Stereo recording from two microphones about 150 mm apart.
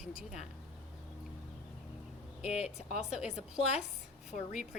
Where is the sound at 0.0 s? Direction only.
5° right (ahead or behind).